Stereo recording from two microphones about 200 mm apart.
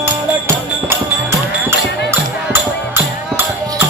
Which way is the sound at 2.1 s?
10° right (ahead or behind).